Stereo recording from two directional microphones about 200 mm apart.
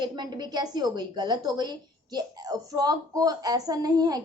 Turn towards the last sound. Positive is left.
turn(degrees=-20)  # may be behind; listen again after turning